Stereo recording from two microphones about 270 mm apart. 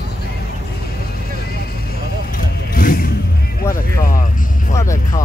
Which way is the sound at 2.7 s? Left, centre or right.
Left.